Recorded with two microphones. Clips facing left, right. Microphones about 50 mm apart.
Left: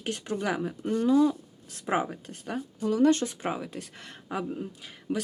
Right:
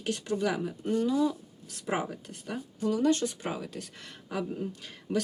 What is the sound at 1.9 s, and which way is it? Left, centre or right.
Speech, left.